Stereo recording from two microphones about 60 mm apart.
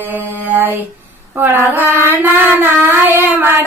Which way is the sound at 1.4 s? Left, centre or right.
Right.